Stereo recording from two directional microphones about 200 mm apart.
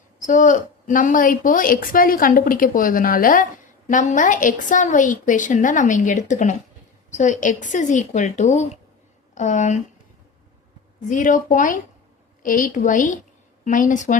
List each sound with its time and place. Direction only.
0.2 s a woman's voice: 40° left (ahead or behind)
11.1 s a woman's voice: 40° left (ahead or behind)